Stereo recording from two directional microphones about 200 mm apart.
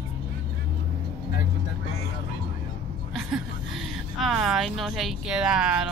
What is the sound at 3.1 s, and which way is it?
A woman's voice, centre (ahead or behind).